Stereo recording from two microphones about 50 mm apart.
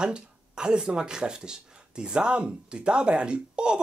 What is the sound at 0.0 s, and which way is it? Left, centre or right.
Speech, centre.